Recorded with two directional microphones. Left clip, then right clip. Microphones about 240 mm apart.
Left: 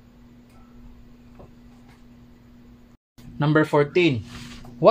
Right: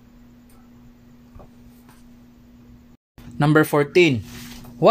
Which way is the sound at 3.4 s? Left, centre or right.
Right.